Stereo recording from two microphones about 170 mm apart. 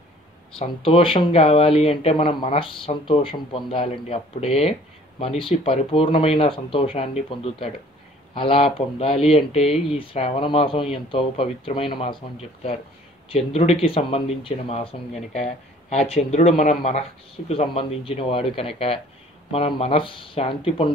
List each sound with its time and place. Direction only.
0.6 s speech: 30° left (ahead or behind)